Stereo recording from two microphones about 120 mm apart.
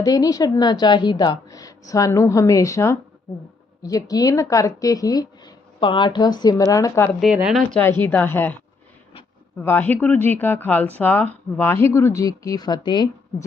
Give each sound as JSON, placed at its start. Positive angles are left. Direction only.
{"t": 0.0, "sound": "a woman's voice", "side_deg": 30}
{"t": 7.4, "sound": "speech", "side_deg": 0}
{"t": 7.8, "sound": "speech", "side_deg": 20}
{"t": 9.6, "sound": "speech", "side_deg": 15}